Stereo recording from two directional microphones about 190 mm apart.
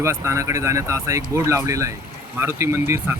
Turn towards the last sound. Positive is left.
turn(degrees=-15)  # may be behind; listen again after turning